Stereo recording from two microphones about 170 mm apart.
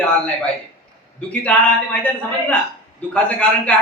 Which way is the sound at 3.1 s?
5° left (ahead or behind).